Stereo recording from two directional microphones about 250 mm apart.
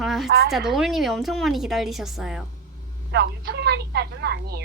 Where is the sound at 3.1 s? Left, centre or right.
Right.